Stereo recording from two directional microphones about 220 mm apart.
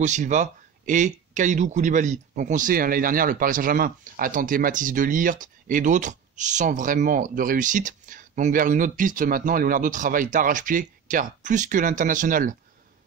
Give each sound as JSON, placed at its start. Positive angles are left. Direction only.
{"t": 0.0, "sound": "speech", "side_deg": -35}